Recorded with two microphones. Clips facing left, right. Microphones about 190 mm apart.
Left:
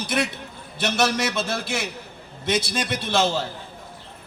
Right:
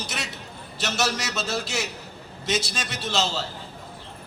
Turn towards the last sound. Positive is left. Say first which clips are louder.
# left 5 dB
turn(degrees=55)  # may be behind; listen again after turning